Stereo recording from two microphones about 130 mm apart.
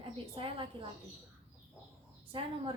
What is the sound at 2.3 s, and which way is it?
Speech, 40° right (ahead or behind).